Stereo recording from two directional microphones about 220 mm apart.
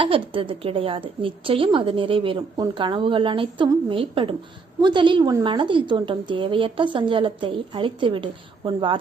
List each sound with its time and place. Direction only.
0.0 s a woman's voice: 25° right (ahead or behind)